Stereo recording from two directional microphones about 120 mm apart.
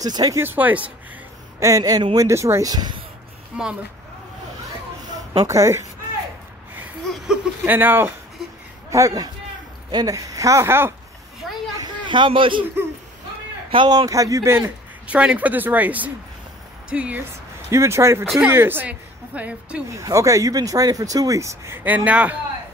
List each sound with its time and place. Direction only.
0.0 s speech: 30° right (ahead or behind)
0.4 s a woman's voice: 15° right (ahead or behind)
1.6 s speech: 25° right (ahead or behind)
3.5 s a woman's voice: 10° right (ahead or behind)
5.5 s speech: 25° right (ahead or behind)
6.8 s a sound: 15° right (ahead or behind)
8.9 s speech: 30° right (ahead or behind)
11.7 s a sound: 40° right (ahead or behind)
13.7 s speech: 40° right (ahead or behind); by 14.7 s 25° right (ahead or behind)
15.0 s a woman's voice: 10° right (ahead or behind)
17.6 s a woman's voice: 25° right (ahead or behind)
19.9 s speech: 25° right (ahead or behind)